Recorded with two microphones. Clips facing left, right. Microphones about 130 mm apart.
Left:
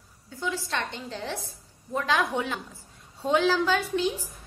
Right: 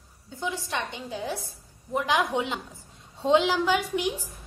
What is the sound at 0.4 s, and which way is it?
A woman's voice, 20° right (ahead or behind).